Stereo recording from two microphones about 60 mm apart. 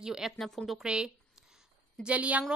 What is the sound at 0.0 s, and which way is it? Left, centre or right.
A woman's voice, centre.